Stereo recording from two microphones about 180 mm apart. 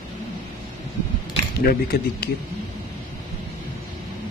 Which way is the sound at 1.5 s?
60° left (ahead or behind).